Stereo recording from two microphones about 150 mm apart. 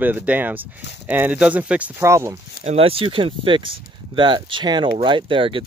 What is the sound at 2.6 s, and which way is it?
Speech, 40° right (ahead or behind).